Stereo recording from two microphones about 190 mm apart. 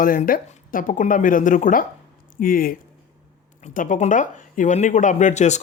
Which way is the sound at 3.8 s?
40° left (ahead or behind).